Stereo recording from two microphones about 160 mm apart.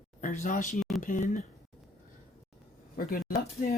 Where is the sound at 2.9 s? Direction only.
65° left (ahead or behind).